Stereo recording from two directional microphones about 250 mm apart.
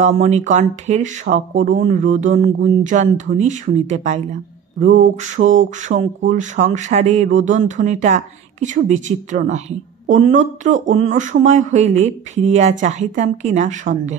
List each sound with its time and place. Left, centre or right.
0.0 s speech: right
5.2 s speech: right